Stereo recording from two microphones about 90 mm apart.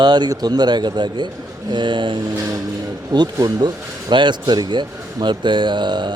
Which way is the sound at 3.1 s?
50° right (ahead or behind).